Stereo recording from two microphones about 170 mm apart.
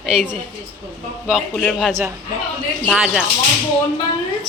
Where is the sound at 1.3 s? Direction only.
Centre (ahead or behind).